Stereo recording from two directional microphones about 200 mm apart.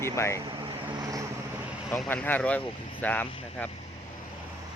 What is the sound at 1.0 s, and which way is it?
Vehicle, 15° right (ahead or behind).